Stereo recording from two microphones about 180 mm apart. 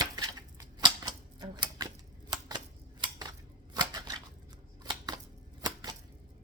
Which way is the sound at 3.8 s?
20° right (ahead or behind).